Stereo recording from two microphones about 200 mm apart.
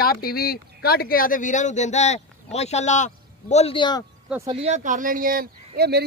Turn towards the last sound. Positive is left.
turn(degrees=-55)  # may be behind; listen again after turning